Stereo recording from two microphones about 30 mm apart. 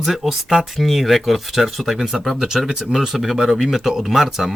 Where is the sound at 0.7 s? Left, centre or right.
Centre.